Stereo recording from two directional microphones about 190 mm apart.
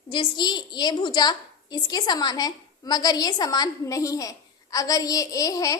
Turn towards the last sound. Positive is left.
turn(degrees=20)  # may be behind; listen again after turning